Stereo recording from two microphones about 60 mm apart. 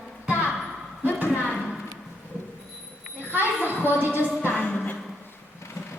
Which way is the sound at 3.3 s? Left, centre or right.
Right.